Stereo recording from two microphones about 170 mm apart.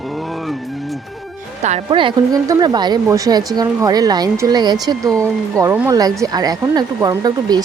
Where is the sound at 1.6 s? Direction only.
35° right (ahead or behind).